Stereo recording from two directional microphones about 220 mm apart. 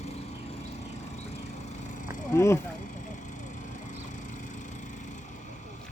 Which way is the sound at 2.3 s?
15° left (ahead or behind).